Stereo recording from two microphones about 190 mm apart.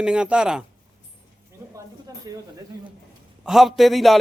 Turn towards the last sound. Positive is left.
turn(degrees=0)  # may be behind; listen again after turning